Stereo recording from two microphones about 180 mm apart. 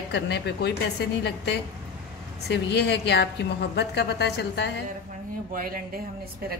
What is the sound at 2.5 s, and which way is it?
A woman's voice, 70° left (ahead or behind).